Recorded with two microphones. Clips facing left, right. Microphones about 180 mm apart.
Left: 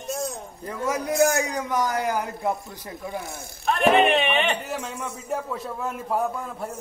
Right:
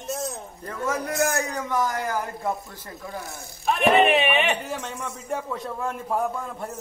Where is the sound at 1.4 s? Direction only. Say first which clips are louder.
Left 1 dB; 15° left (ahead or behind).